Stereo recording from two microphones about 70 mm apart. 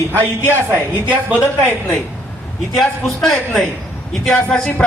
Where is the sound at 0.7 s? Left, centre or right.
Right.